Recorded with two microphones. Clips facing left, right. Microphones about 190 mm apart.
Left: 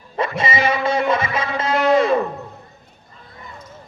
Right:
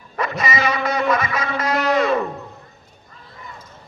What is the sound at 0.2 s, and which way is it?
Music, 30° left (ahead or behind).